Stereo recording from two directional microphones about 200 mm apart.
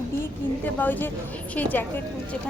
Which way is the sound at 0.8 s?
10° left (ahead or behind).